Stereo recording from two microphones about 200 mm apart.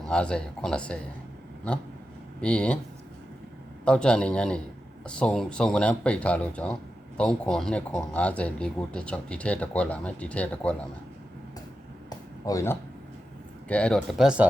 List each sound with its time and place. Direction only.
0.0 s speech: 5° left (ahead or behind)
2.4 s speech: 5° left (ahead or behind)
3.8 s speech: 5° left (ahead or behind)
12.0 s a sound: 15° left (ahead or behind)
13.7 s speech: 5° left (ahead or behind)